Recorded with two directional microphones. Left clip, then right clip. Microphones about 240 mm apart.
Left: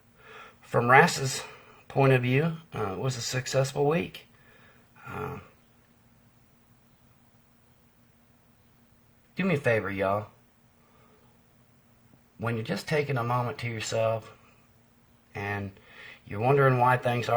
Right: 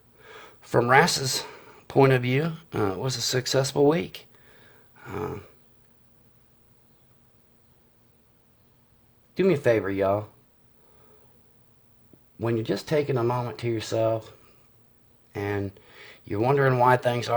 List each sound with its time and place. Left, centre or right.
0.3 s speech: right
9.3 s speech: right
12.4 s speech: right